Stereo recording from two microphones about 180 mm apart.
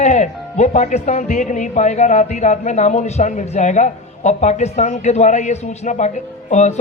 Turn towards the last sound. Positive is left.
turn(degrees=40)  # may be behind; listen again after turning